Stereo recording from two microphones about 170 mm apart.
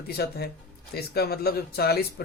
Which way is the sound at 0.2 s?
70° left (ahead or behind).